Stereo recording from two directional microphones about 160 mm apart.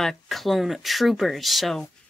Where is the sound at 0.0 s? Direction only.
Centre (ahead or behind).